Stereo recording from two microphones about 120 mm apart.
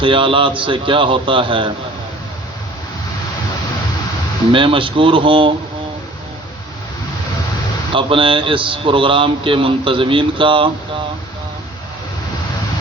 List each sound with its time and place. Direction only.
0.0 s speech: 45° right (ahead or behind)
4.5 s speech: 45° right (ahead or behind)
7.9 s speech: 45° right (ahead or behind)